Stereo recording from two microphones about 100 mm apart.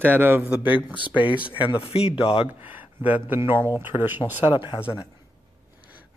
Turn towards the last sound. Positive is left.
turn(degrees=55)  # may be behind; listen again after turning